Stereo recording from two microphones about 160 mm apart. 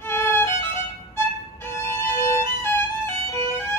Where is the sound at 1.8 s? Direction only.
15° left (ahead or behind).